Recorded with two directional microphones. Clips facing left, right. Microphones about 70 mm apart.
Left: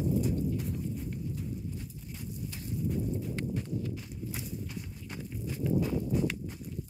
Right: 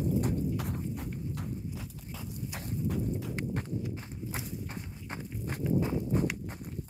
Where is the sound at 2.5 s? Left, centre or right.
Right.